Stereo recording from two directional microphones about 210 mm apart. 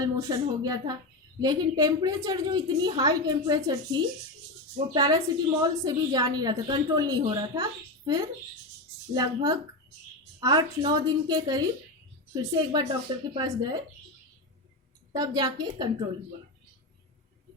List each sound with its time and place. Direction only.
0.0 s a woman's voice: 20° right (ahead or behind)
4.9 s a woman's voice: 15° right (ahead or behind)
15.1 s a woman's voice: 20° right (ahead or behind)